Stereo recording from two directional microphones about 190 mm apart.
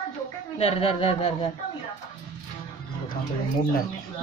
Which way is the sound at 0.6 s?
30° left (ahead or behind).